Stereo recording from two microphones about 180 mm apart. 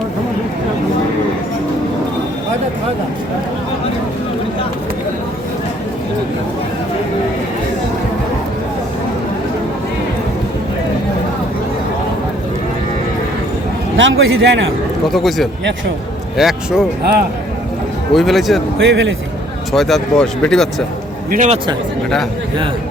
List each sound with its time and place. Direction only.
13.9 s a man's voice: 90° right
15.0 s speech: centre (ahead or behind)
18.1 s speech: centre (ahead or behind)
18.8 s a man's voice: 90° right
19.7 s speech: centre (ahead or behind)
21.2 s a man's voice: 45° right (ahead or behind)